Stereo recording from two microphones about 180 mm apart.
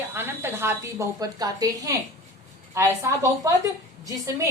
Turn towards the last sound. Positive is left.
turn(degrees=-20)  # may be behind; listen again after turning